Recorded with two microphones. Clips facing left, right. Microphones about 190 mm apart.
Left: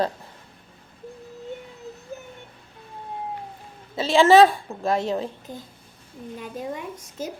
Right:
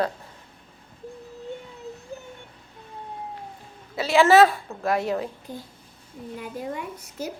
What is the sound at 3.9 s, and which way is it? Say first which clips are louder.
A child's voice: left 2 dB; 25° left (ahead or behind).